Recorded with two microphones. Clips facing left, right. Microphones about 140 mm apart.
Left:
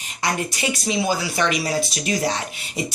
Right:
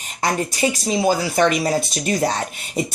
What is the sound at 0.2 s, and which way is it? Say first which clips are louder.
Speech: right 4 dB; 40° right (ahead or behind).